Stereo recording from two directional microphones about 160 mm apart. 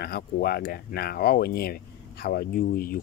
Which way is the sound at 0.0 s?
75° left (ahead or behind).